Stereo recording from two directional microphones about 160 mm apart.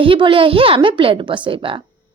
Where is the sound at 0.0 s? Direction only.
30° right (ahead or behind).